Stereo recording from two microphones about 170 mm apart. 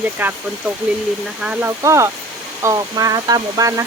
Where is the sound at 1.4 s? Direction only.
5° right (ahead or behind).